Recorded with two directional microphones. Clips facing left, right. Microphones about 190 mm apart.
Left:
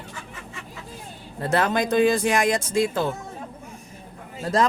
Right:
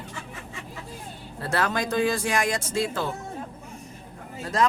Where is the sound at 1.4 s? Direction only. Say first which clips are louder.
Left 4 dB; 20° left (ahead or behind).